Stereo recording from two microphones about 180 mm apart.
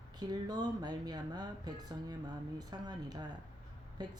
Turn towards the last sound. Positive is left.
turn(degrees=-25)  # may be behind; listen again after turning